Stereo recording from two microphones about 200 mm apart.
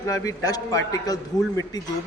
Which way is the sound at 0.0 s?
15° left (ahead or behind).